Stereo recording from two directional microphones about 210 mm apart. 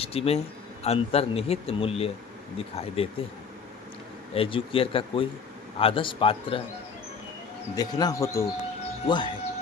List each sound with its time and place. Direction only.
0.0 s a man's voice: 25° left (ahead or behind)
4.4 s a man's voice: 25° left (ahead or behind)
7.8 s a man's voice: 20° left (ahead or behind)